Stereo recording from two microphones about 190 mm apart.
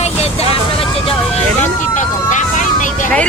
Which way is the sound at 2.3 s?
40° left (ahead or behind).